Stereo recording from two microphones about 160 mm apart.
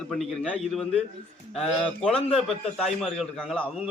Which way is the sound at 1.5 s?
Centre (ahead or behind).